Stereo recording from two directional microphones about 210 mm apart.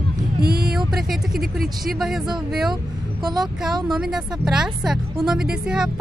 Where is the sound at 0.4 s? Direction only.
50° right (ahead or behind).